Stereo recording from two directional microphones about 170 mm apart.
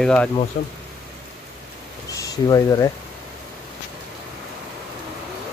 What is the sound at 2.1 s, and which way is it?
Speech, 20° left (ahead or behind).